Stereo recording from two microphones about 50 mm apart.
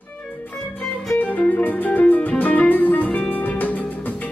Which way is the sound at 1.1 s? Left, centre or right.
Left.